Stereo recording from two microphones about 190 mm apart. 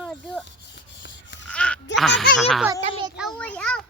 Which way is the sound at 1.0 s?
70° left (ahead or behind).